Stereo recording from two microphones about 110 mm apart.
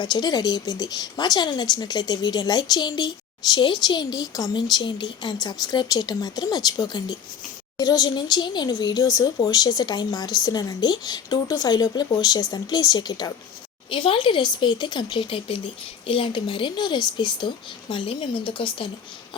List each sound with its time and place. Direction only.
0.0 s speech: 40° left (ahead or behind)
13.9 s speech: 55° left (ahead or behind)